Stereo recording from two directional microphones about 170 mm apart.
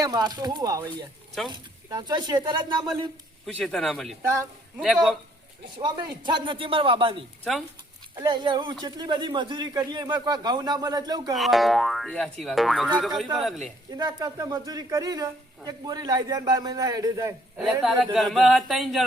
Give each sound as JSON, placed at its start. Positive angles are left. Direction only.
{"t": 0.0, "sound": "speech", "side_deg": -20}
{"t": 3.6, "sound": "speech", "side_deg": 0}
{"t": 4.2, "sound": "speech", "side_deg": -15}
{"t": 4.8, "sound": "speech", "side_deg": 0}
{"t": 5.8, "sound": "speech", "side_deg": -25}
{"t": 11.3, "sound": "speech", "side_deg": 0}
{"t": 13.9, "sound": "speech", "side_deg": -25}
{"t": 17.6, "sound": "speech", "side_deg": -5}